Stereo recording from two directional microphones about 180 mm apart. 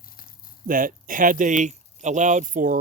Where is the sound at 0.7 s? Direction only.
50° right (ahead or behind).